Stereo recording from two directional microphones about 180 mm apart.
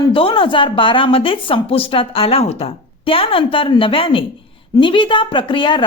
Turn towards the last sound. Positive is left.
turn(degrees=25)  # may be behind; listen again after turning